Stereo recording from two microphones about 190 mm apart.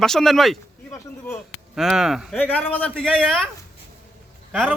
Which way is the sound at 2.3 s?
10° left (ahead or behind).